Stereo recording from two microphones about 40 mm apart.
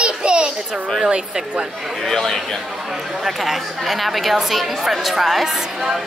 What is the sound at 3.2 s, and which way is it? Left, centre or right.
A woman's voice, centre.